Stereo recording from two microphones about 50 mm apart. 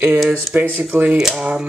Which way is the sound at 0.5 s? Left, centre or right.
Right.